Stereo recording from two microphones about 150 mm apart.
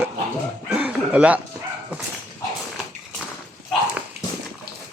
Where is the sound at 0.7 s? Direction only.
10° right (ahead or behind).